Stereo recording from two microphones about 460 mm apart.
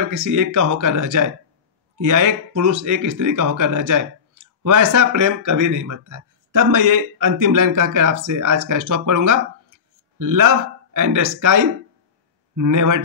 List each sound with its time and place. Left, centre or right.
0.1 s speech: right